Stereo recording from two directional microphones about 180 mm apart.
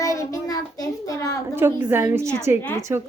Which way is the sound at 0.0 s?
20° left (ahead or behind).